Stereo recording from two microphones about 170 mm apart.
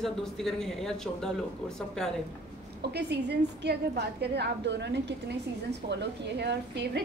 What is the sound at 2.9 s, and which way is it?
A woman's voice, 80° right.